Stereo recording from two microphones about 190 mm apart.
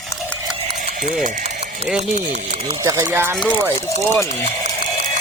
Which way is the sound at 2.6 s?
20° right (ahead or behind).